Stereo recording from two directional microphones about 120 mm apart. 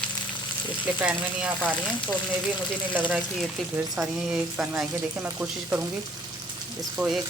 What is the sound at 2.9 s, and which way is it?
Speech, 15° right (ahead or behind).